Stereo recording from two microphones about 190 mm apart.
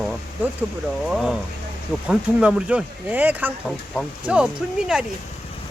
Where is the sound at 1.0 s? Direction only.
Centre (ahead or behind).